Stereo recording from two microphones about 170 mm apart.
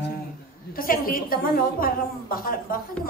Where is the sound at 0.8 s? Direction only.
55° left (ahead or behind).